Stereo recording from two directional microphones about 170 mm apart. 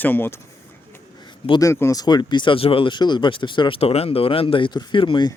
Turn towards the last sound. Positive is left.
turn(degrees=25)  # may be behind; listen again after turning